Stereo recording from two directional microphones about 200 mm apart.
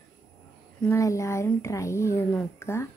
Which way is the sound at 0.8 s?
15° left (ahead or behind).